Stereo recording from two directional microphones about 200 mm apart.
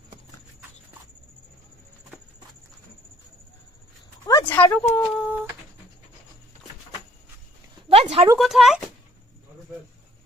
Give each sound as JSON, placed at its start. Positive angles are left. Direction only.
{"t": 4.3, "sound": "speech", "side_deg": 15}
{"t": 7.9, "sound": "speech", "side_deg": -30}
{"t": 8.4, "sound": "speech", "side_deg": 0}